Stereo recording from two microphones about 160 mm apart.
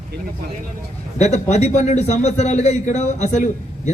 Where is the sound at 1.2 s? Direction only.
45° left (ahead or behind).